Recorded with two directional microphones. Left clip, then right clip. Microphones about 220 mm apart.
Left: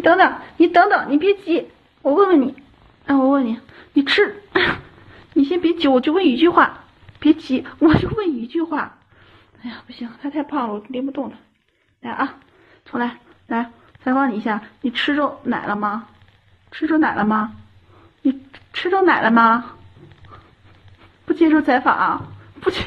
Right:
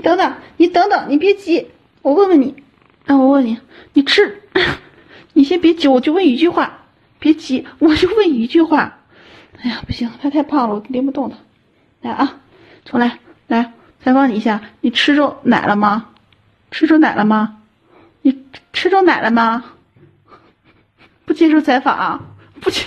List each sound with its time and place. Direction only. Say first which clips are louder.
0.0 s a woman's voice: left 1 dB; 35° right (ahead or behind)
21.3 s a woman's voice: right 3 dB; 40° right (ahead or behind)